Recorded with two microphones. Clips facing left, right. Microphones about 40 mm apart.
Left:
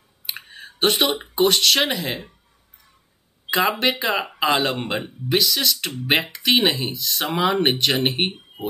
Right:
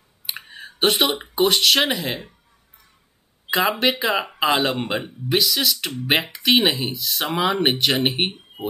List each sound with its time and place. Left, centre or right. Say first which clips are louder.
0.3 s speech: right 1 dB; centre
3.4 s speech: even; centre